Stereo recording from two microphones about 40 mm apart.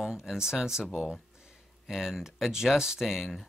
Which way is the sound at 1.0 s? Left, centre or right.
Right.